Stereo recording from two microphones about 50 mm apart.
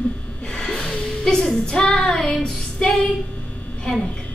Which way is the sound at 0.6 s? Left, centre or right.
Centre.